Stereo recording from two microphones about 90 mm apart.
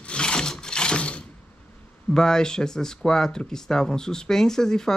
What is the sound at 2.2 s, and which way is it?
Speech, 5° left (ahead or behind).